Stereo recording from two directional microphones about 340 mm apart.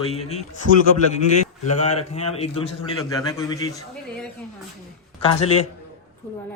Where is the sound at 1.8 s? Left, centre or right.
Centre.